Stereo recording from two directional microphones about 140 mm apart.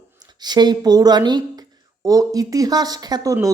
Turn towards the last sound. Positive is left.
turn(degrees=-20)  # may be behind; listen again after turning